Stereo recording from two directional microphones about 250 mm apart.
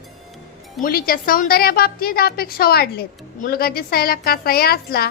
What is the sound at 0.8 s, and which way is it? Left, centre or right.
A woman's voice, left.